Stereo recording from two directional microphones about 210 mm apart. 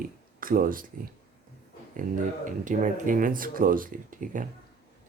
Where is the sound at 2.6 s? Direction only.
40° right (ahead or behind).